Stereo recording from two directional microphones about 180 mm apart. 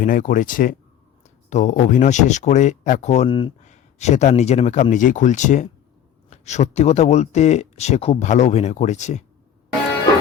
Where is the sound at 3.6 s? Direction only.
40° left (ahead or behind).